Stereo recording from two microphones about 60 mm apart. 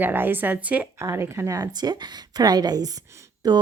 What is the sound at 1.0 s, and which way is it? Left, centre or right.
Speech, right.